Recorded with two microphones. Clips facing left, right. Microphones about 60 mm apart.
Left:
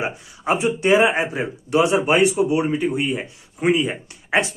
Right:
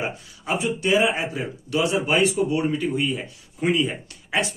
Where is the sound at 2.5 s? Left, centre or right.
Centre.